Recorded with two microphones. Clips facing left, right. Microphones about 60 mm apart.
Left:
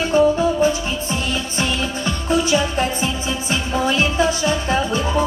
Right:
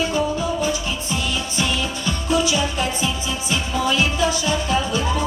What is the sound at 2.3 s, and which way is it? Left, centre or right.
Music, left.